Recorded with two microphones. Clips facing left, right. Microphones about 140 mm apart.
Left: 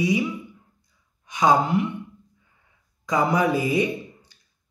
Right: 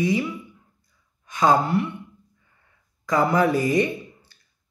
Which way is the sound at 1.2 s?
15° left (ahead or behind).